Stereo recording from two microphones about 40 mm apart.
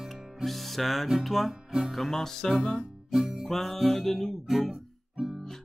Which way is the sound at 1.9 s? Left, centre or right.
Centre.